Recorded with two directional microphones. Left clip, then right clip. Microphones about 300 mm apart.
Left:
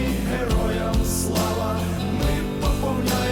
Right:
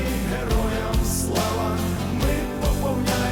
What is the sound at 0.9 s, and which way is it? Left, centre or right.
Music, centre.